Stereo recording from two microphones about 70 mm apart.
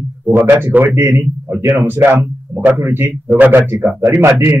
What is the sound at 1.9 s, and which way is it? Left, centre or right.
A man's voice, right.